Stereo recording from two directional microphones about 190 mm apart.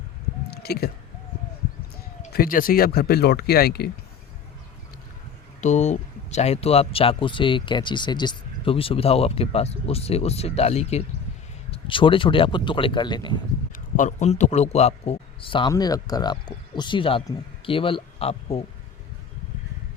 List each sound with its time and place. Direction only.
0.5 s chewing: 55° left (ahead or behind)
2.3 s speech: 50° left (ahead or behind)
5.5 s a man's voice: 40° left (ahead or behind); by 13.3 s 25° left (ahead or behind)
13.7 s a man's voice: 40° left (ahead or behind)